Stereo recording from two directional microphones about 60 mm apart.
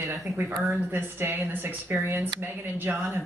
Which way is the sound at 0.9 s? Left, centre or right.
Right.